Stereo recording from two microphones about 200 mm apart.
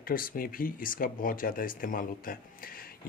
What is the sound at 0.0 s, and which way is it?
Speech, 45° left (ahead or behind).